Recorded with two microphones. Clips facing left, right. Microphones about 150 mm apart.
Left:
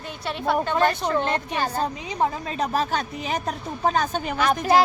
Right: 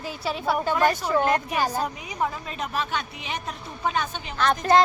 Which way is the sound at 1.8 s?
30° left (ahead or behind).